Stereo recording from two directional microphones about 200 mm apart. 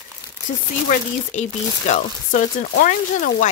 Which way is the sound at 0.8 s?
35° left (ahead or behind).